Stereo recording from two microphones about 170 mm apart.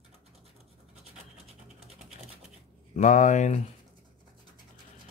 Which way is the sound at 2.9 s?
45° left (ahead or behind).